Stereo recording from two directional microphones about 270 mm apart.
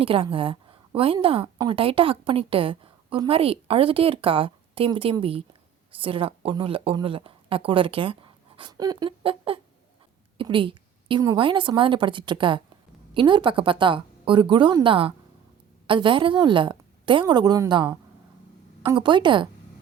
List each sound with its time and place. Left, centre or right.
0.0 s a woman's voice: centre